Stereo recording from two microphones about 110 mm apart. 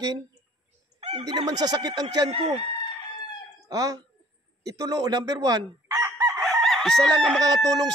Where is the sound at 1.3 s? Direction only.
40° right (ahead or behind).